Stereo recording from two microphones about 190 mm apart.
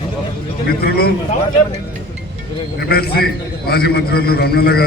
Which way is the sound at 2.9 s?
55° left (ahead or behind).